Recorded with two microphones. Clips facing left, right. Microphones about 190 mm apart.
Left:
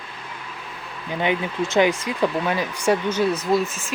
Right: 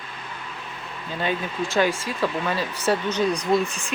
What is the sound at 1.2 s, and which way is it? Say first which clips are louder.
Speech: left 3 dB; 15° left (ahead or behind).